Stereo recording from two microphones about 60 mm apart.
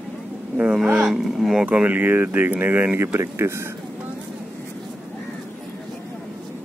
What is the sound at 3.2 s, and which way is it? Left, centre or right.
Speech, right.